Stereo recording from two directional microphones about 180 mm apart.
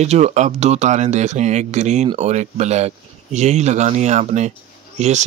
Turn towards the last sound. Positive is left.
turn(degrees=-40)  # may be behind; listen again after turning